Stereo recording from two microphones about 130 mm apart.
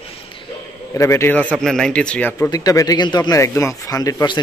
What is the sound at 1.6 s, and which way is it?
Speech, 5° left (ahead or behind).